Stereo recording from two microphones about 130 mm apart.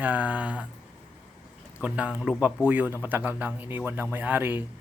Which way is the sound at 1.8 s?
10° right (ahead or behind).